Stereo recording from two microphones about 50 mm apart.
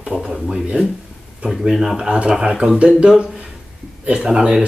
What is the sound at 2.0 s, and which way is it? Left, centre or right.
Speech, centre.